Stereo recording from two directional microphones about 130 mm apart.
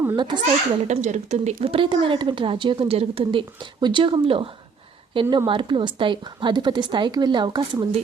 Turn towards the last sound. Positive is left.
turn(degrees=-35)  # may be behind; listen again after turning